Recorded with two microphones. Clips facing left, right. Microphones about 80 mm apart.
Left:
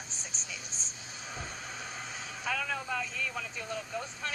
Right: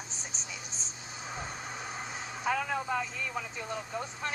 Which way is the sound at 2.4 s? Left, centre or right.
Right.